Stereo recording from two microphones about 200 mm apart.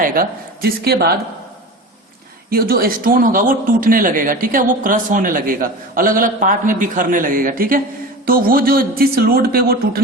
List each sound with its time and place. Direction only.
0.0 s a woman's voice: 45° right (ahead or behind)
2.5 s a man's voice: 50° right (ahead or behind)